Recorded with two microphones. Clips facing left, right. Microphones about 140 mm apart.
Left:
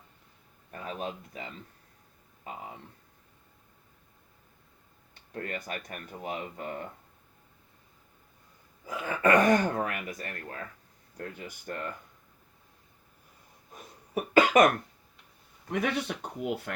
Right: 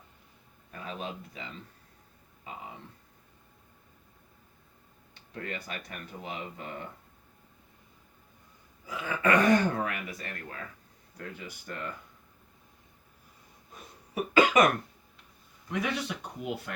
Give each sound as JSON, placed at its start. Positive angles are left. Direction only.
{"t": 0.7, "sound": "speech", "side_deg": 45}
{"t": 5.3, "sound": "speech", "side_deg": 45}
{"t": 8.9, "sound": "speech", "side_deg": 45}
{"t": 14.1, "sound": "cough", "side_deg": 45}
{"t": 15.7, "sound": "speech", "side_deg": 60}